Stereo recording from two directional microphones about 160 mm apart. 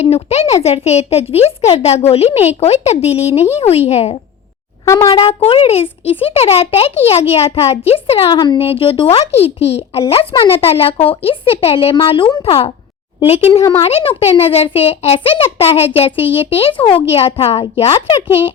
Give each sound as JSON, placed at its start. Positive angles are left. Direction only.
{"t": 0.0, "sound": "a woman's voice", "side_deg": 40}
{"t": 13.6, "sound": "speech", "side_deg": 20}
{"t": 13.8, "sound": "a woman's voice", "side_deg": 35}